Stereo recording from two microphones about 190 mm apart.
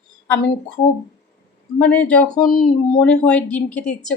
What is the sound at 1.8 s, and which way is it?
Speech, 5° left (ahead or behind).